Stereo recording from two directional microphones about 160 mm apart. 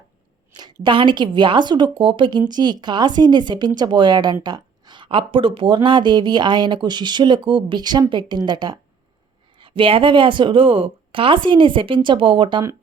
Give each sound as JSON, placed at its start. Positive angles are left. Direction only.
{"t": 0.5, "sound": "speech", "side_deg": -30}